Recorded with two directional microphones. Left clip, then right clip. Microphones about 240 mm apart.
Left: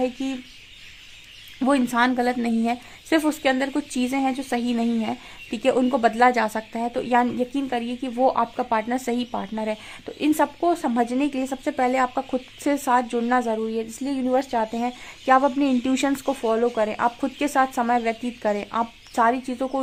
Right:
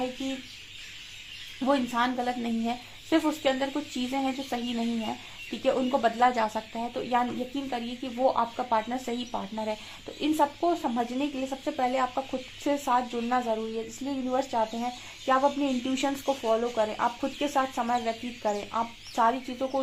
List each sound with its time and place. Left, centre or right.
1.6 s speech: left